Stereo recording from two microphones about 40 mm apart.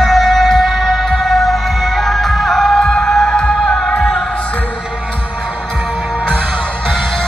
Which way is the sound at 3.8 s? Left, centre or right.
Centre.